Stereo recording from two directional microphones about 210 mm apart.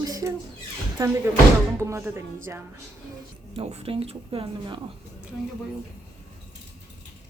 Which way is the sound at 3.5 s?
25° right (ahead or behind).